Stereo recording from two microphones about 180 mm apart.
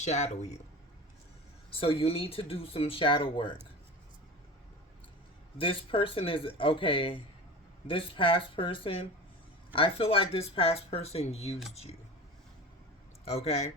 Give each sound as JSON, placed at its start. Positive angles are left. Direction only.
{"t": 0.0, "sound": "speech", "side_deg": 40}
{"t": 1.7, "sound": "speech", "side_deg": 30}
{"t": 5.5, "sound": "speech", "side_deg": 30}
{"t": 13.2, "sound": "speech", "side_deg": 35}